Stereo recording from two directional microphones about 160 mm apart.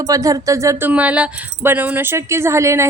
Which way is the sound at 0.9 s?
10° right (ahead or behind).